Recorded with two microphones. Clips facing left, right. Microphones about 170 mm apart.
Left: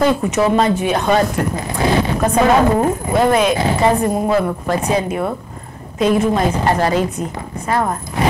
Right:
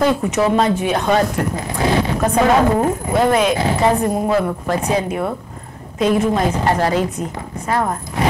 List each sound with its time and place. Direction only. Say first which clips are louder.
0.0 s speech: left 1 dB; 15° left (ahead or behind)